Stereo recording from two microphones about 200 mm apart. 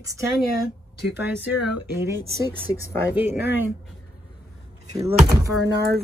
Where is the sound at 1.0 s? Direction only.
55° left (ahead or behind).